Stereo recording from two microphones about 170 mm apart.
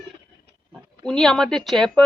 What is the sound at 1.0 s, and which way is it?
Speech, 5° left (ahead or behind).